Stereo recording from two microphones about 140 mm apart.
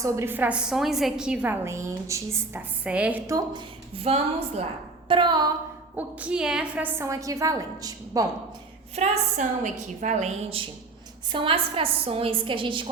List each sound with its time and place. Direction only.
0.0 s speech: 15° right (ahead or behind)
1.6 s speech: 20° right (ahead or behind)
3.2 s a woman's voice: 25° right (ahead or behind)
3.9 s a woman's voice: 45° right (ahead or behind)
5.0 s a woman's voice: 35° right (ahead or behind)
6.0 s a woman's voice: 10° right (ahead or behind); by 8.3 s 25° right (ahead or behind)
9.0 s a woman's voice: 60° right (ahead or behind)
11.3 s a woman's voice: 35° right (ahead or behind)